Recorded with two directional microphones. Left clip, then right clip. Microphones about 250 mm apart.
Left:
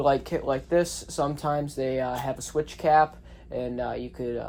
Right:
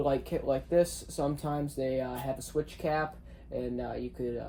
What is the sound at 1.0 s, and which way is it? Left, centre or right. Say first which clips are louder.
Speech: left 6 dB; centre.